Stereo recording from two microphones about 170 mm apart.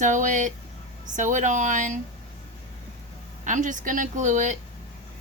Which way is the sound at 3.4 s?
50° right (ahead or behind).